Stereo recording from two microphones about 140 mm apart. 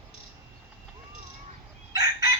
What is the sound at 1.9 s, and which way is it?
Chicken, 25° right (ahead or behind).